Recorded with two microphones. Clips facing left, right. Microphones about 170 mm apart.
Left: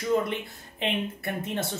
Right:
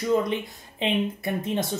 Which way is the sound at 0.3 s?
15° right (ahead or behind).